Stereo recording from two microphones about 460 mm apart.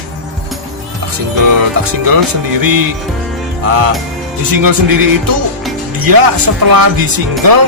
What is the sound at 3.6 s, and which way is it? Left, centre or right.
Music, right.